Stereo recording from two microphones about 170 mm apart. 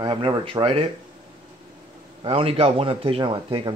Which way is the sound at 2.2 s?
35° right (ahead or behind).